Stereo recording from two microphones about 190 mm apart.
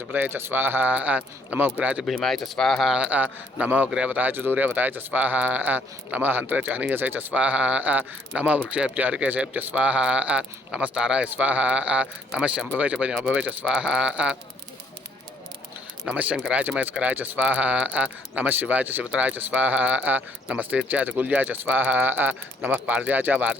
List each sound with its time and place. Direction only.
0.1 s a man's voice: 10° right (ahead or behind)
16.0 s a man's voice: 5° right (ahead or behind)